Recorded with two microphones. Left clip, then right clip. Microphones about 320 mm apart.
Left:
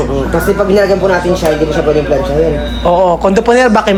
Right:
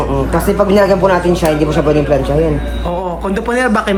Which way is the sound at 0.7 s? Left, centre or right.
Right.